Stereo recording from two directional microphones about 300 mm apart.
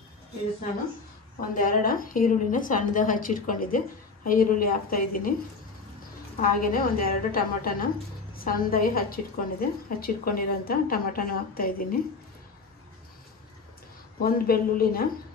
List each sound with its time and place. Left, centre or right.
1.5 s a woman's voice: left
6.4 s a woman's voice: left
14.2 s a woman's voice: left